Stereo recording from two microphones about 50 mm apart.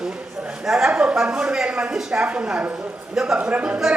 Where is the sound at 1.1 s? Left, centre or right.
Centre.